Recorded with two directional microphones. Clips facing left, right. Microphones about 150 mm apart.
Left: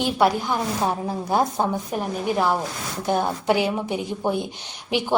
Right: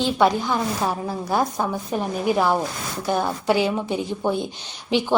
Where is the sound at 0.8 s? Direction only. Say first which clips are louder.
Even; 20° left (ahead or behind).